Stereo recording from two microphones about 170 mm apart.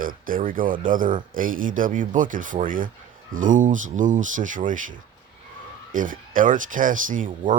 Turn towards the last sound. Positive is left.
turn(degrees=-50)  # may be behind; listen again after turning